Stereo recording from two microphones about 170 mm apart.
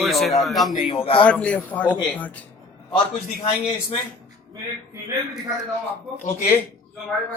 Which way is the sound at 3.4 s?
35° left (ahead or behind).